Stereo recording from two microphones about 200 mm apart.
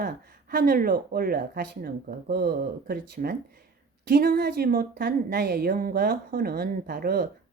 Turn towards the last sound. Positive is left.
turn(degrees=-50)  # may be behind; listen again after turning